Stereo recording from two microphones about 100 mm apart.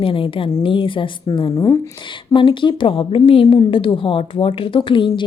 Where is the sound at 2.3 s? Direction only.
55° left (ahead or behind).